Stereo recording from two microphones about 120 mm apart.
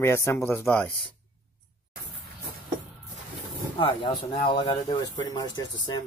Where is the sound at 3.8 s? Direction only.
40° left (ahead or behind).